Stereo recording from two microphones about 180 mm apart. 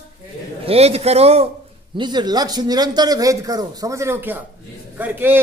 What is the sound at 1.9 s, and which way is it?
A man's voice, 25° right (ahead or behind).